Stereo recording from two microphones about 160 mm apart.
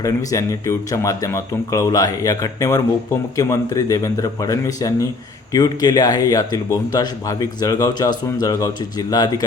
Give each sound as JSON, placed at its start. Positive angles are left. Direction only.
{"t": 0.0, "sound": "speech", "side_deg": 20}